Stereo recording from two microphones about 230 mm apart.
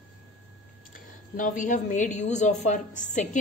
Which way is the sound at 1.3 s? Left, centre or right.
Left.